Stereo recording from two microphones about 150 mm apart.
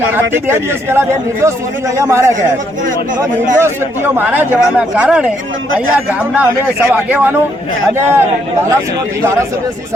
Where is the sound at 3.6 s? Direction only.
15° right (ahead or behind).